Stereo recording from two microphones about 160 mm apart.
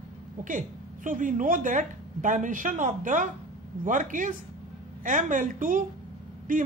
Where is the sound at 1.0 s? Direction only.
55° right (ahead or behind).